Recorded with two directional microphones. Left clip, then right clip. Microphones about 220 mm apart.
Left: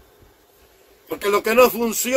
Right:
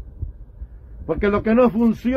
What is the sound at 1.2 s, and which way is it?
Speech, 15° left (ahead or behind).